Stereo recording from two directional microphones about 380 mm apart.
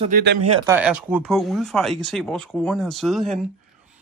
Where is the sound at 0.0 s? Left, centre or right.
Right.